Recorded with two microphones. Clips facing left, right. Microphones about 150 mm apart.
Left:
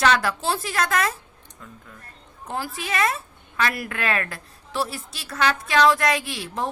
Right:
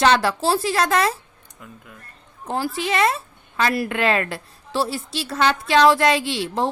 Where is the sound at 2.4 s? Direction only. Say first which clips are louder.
Right 6 dB; 30° right (ahead or behind).